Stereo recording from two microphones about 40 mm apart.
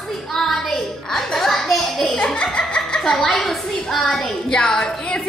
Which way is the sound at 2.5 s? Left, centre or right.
Left.